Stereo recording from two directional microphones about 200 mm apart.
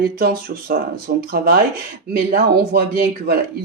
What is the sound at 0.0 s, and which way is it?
Speech, 50° right (ahead or behind).